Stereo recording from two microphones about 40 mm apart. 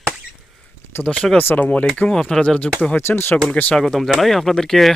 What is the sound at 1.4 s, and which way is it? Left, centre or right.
Speech, left.